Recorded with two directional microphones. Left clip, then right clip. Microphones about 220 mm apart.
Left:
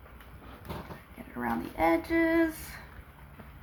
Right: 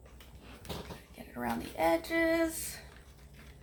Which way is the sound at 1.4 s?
45° right (ahead or behind).